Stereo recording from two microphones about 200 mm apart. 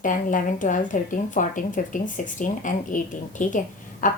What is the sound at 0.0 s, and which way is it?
A woman's voice, 40° left (ahead or behind).